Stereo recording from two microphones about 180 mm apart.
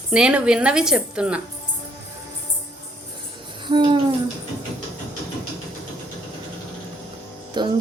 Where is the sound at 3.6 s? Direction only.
25° right (ahead or behind).